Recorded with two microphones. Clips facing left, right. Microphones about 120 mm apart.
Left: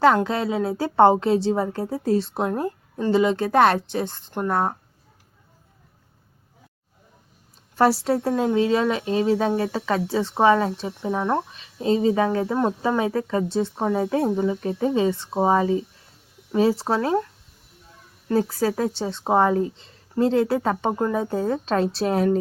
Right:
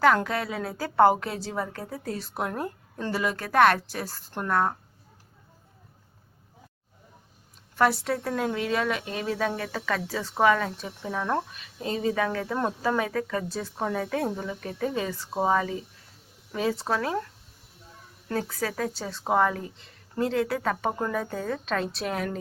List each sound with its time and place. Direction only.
0.3 s a woman's voice: 25° left (ahead or behind)
7.8 s a woman's voice: 30° left (ahead or behind)
18.3 s a woman's voice: 30° left (ahead or behind)